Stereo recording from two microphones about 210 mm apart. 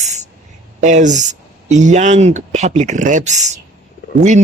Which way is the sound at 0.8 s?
35° right (ahead or behind).